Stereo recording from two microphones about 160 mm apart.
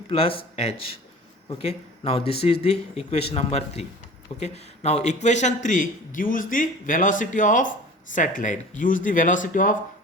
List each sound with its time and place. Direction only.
0.1 s a man's voice: 35° left (ahead or behind); by 9.7 s 55° left (ahead or behind)